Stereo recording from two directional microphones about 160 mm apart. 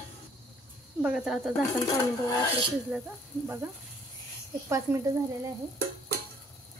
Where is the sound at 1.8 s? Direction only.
20° left (ahead or behind).